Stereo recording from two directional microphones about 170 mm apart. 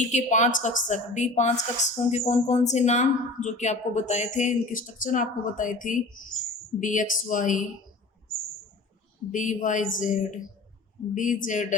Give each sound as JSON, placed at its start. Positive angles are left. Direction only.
{"t": 0.1, "sound": "a woman's voice", "side_deg": 45}
{"t": 9.3, "sound": "a woman's voice", "side_deg": 50}